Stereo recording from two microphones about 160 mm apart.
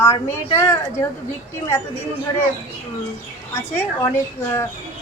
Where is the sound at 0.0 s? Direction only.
20° left (ahead or behind).